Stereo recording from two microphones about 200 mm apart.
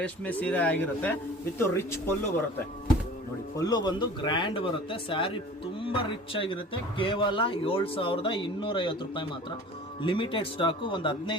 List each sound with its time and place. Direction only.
0.0 s speech: 5° left (ahead or behind)
3.6 s a man's voice: 20° left (ahead or behind)